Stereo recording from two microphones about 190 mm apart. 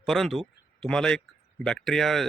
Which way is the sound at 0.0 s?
Centre (ahead or behind).